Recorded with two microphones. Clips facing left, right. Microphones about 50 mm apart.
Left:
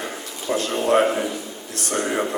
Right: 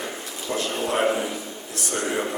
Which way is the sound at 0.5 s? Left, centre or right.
Left.